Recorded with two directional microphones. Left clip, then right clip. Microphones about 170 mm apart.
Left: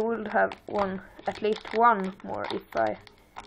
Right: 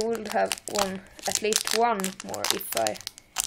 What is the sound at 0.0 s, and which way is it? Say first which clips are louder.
Speech: left 1 dB; 25° right (ahead or behind).